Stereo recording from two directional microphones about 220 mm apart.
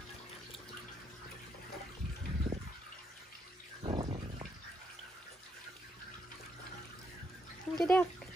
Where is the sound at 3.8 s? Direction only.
25° right (ahead or behind).